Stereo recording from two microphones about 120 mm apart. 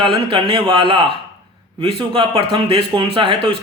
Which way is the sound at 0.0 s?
45° right (ahead or behind).